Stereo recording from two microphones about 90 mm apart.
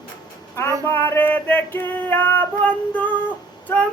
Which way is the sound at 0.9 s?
25° left (ahead or behind).